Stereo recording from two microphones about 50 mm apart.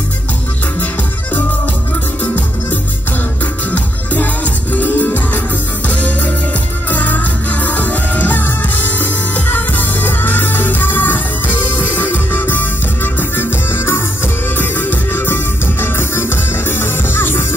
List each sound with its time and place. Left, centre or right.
3.7 s music: left